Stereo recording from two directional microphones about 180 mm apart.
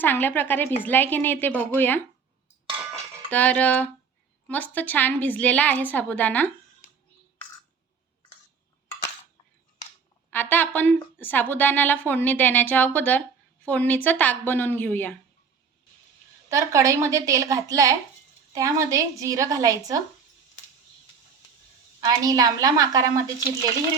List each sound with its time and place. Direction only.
0.0 s a woman's voice: 10° left (ahead or behind)
2.9 s music: 10° left (ahead or behind)
4.4 s a woman's voice: 10° left (ahead or behind)
10.3 s a woman's voice: 10° left (ahead or behind)
16.5 s a woman's voice: 15° right (ahead or behind)
22.0 s a woman's voice: 20° right (ahead or behind)